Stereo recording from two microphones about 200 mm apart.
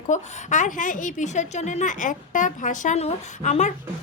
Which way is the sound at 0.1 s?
40° left (ahead or behind).